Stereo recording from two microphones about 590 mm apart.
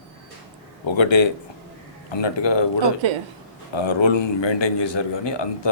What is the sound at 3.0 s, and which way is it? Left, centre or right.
Speech, right.